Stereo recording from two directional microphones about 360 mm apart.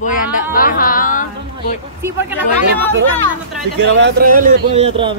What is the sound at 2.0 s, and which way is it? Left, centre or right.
Speech, centre.